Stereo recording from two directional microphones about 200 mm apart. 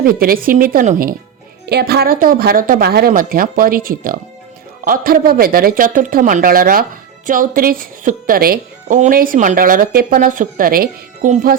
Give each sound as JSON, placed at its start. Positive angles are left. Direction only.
{"t": 0.0, "sound": "a woman's voice", "side_deg": -45}